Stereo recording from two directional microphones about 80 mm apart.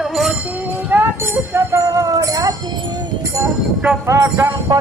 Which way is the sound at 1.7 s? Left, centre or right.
Right.